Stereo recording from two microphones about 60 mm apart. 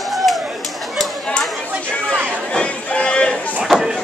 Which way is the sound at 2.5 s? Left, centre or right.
Centre.